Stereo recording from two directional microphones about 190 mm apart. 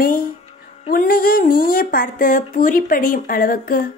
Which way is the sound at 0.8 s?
50° left (ahead or behind).